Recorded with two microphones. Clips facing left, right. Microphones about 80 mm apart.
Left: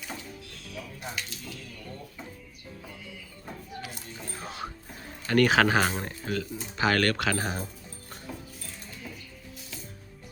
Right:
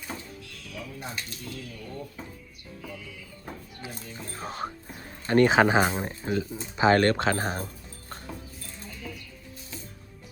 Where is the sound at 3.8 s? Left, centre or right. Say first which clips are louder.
Right 1 dB; right.